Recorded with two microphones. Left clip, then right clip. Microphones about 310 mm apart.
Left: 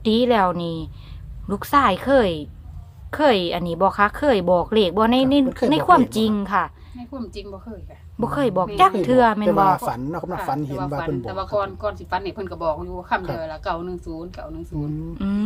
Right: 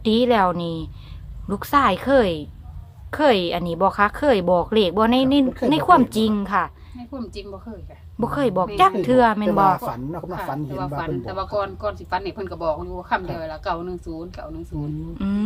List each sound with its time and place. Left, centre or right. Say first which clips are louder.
0.0 s speech: even; centre
10.1 s speech: left 3 dB; left
10.3 s speech: left 2 dB; centre